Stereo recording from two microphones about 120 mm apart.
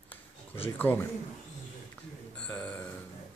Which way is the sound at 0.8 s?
15° left (ahead or behind).